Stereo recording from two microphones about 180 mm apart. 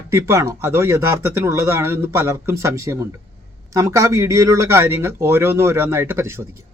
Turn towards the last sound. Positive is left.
turn(degrees=-15)  # may be behind; listen again after turning